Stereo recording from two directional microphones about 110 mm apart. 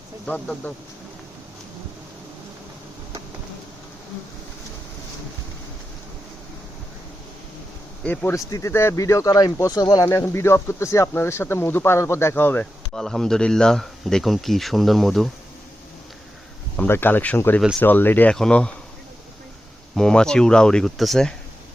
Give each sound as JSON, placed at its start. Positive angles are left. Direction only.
{"t": 0.3, "sound": "speech", "side_deg": 10}
{"t": 8.0, "sound": "speech", "side_deg": 20}
{"t": 8.4, "sound": "speech", "side_deg": 30}
{"t": 10.1, "sound": "speech", "side_deg": 25}
{"t": 12.9, "sound": "speech", "side_deg": 5}
{"t": 16.7, "sound": "speech", "side_deg": 20}
{"t": 20.0, "sound": "speech", "side_deg": 5}